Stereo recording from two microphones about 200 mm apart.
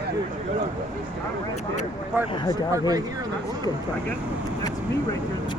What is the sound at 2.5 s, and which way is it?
Speech, 20° right (ahead or behind).